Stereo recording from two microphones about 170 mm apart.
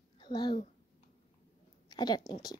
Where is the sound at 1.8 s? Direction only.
25° left (ahead or behind).